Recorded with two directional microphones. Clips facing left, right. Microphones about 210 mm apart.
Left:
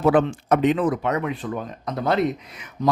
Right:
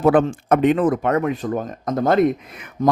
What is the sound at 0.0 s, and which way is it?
Speech, 50° right (ahead or behind).